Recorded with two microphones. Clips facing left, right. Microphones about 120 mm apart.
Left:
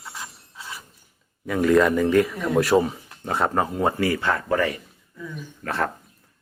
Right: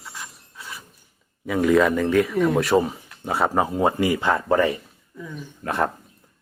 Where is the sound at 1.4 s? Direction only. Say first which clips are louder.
Even; 5° right (ahead or behind).